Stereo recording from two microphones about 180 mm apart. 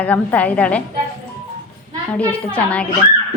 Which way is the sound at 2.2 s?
5° left (ahead or behind).